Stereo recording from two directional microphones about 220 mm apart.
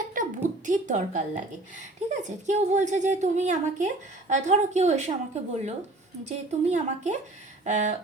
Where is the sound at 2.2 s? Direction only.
35° right (ahead or behind).